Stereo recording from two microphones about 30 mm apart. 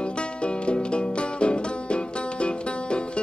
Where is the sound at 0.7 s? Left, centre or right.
Left.